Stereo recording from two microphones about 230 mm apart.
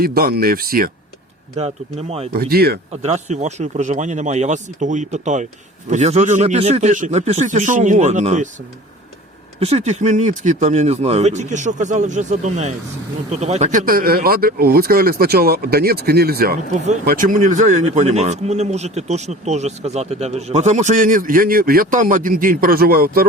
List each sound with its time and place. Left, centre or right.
0.0 s a man's voice: right
1.5 s speech: right
2.3 s a man's voice: right
3.0 s a man's voice: right
9.6 s a man's voice: right